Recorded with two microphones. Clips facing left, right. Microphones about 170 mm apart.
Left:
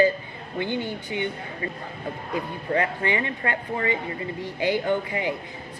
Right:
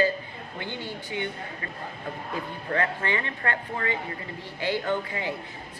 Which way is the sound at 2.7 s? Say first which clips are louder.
Left 3 dB; 15° left (ahead or behind).